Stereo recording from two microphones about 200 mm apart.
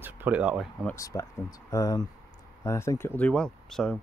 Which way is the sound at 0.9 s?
15° left (ahead or behind).